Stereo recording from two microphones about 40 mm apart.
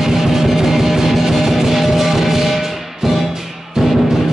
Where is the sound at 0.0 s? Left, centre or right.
Centre.